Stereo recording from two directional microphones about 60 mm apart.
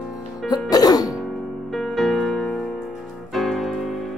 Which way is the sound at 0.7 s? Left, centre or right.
Left.